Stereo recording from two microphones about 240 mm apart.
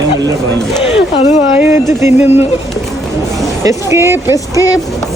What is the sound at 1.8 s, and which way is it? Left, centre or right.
Speech, centre.